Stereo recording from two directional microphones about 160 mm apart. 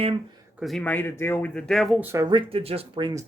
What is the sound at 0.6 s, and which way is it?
Speech, centre (ahead or behind).